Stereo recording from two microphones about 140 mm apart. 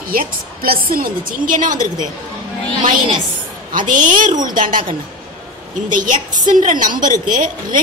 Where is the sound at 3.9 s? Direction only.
75° right (ahead or behind).